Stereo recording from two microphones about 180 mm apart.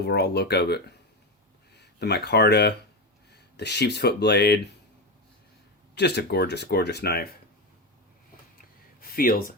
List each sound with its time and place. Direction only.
0.0 s speech: 65° left (ahead or behind)
5.9 s speech: 65° left (ahead or behind)
9.0 s a sound: 55° left (ahead or behind)